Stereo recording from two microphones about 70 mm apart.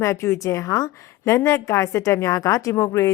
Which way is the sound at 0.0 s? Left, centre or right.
Left.